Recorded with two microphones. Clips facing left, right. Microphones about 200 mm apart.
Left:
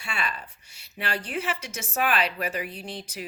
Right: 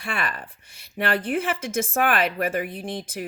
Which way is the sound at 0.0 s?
55° right (ahead or behind).